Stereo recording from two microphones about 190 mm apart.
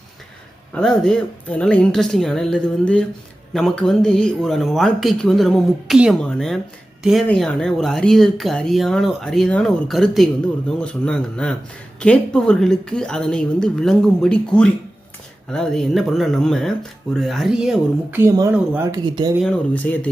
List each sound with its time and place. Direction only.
0.7 s speech: 5° left (ahead or behind)
19.0 s speech: 25° right (ahead or behind)
19.4 s speech: 5° left (ahead or behind)